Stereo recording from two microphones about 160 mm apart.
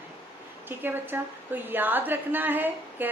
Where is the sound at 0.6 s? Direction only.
15° right (ahead or behind).